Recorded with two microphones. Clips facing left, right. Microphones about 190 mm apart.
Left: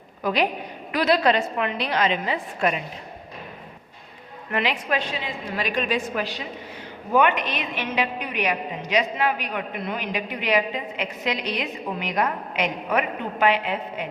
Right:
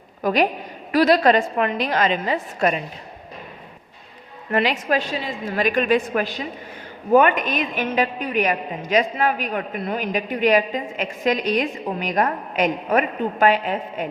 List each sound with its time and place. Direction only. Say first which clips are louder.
0.2 s a woman's voice: right 4 dB; 45° right (ahead or behind)
4.5 s a woman's voice: right 4 dB; 40° right (ahead or behind)